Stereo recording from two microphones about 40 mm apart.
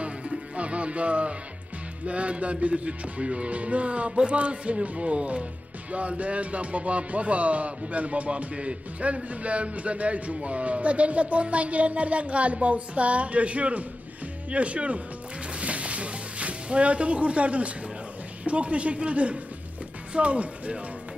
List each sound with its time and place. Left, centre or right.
0.0 s music: right
2.0 s speech: right
15.5 s music: right
18.4 s speech: right